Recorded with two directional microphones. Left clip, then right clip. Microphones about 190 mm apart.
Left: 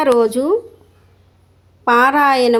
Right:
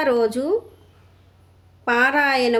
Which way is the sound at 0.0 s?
20° left (ahead or behind).